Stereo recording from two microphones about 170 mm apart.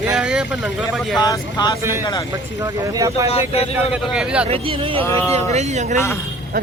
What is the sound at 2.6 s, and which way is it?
Speech, 20° right (ahead or behind).